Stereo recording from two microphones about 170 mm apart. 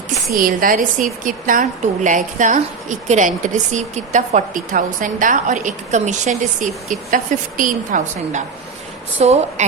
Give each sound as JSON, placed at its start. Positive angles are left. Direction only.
{"t": 0.3, "sound": "a woman's voice", "side_deg": -55}
{"t": 6.7, "sound": "speech", "side_deg": 0}
{"t": 7.1, "sound": "a woman's voice", "side_deg": -50}